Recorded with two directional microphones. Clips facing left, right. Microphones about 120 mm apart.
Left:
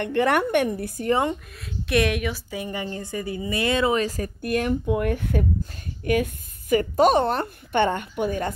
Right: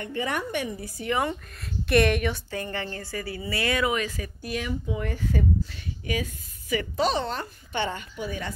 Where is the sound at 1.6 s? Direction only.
Centre (ahead or behind); by 4.3 s 35° left (ahead or behind).